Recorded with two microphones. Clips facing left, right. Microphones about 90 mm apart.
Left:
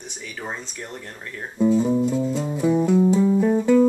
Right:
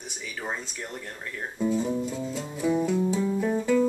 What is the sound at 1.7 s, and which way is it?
Music, 5° left (ahead or behind).